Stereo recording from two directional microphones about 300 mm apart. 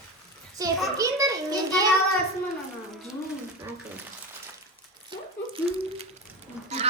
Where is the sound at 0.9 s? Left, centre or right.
Centre.